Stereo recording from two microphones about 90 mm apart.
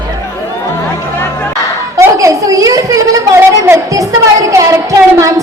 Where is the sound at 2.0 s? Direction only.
35° right (ahead or behind).